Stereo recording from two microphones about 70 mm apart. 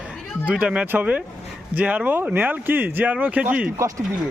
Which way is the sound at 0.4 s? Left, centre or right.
Centre.